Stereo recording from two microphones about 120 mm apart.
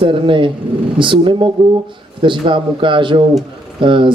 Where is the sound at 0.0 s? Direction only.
45° right (ahead or behind).